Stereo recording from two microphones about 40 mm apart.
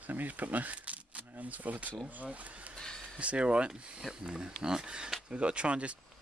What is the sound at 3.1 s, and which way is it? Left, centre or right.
Speech, right.